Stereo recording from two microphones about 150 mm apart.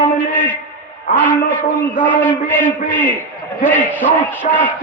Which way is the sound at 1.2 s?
10° left (ahead or behind).